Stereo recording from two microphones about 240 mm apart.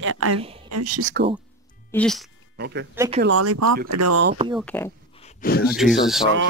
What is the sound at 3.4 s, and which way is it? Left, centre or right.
Speech, right.